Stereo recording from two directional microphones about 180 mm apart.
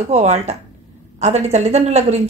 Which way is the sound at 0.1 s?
35° right (ahead or behind).